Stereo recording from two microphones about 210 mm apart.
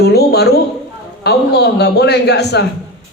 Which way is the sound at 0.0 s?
50° left (ahead or behind).